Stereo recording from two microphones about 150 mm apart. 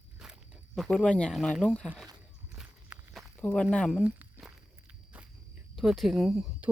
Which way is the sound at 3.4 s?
5° left (ahead or behind).